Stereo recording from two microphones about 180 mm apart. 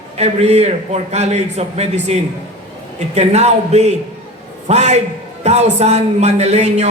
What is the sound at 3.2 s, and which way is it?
Speech, 40° right (ahead or behind).